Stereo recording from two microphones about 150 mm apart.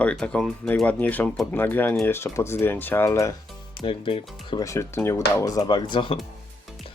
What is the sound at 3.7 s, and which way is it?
Speech, 35° left (ahead or behind).